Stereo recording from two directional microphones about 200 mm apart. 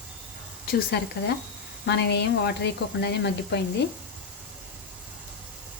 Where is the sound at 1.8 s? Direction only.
55° left (ahead or behind).